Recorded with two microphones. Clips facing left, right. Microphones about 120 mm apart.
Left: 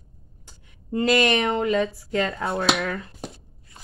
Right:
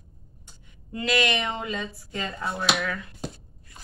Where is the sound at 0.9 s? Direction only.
40° left (ahead or behind).